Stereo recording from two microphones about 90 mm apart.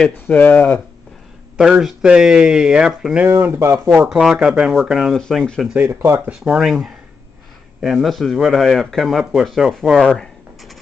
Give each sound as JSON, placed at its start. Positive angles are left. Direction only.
{"t": 0.0, "sound": "speech", "side_deg": 20}
{"t": 1.6, "sound": "speech", "side_deg": -5}
{"t": 3.3, "sound": "speech", "side_deg": -25}
{"t": 3.9, "sound": "speech", "side_deg": -15}
{"t": 4.2, "sound": "speech", "side_deg": -5}
{"t": 5.8, "sound": "speech", "side_deg": -30}
{"t": 6.2, "sound": "a man's voice", "side_deg": -10}